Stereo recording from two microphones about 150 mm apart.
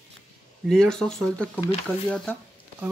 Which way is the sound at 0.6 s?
5° left (ahead or behind).